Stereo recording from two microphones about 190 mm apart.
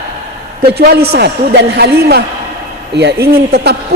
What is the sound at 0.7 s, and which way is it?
A man's voice, 55° right (ahead or behind).